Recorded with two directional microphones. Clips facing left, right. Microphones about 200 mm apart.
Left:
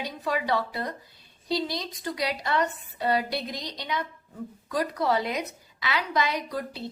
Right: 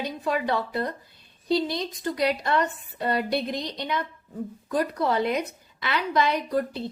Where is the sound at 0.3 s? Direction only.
50° right (ahead or behind).